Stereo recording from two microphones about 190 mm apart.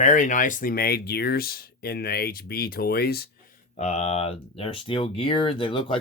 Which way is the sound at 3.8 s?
35° left (ahead or behind).